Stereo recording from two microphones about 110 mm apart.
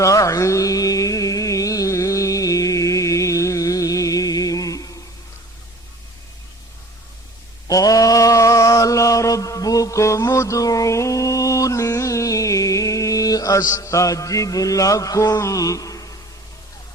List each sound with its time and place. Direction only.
0.0 s carnatic music: 30° left (ahead or behind)
7.7 s mantra: 30° left (ahead or behind)